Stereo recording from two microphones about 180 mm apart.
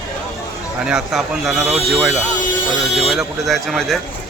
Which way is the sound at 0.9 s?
Centre (ahead or behind).